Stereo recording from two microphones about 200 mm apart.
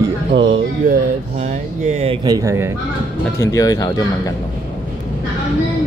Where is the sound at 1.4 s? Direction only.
35° right (ahead or behind).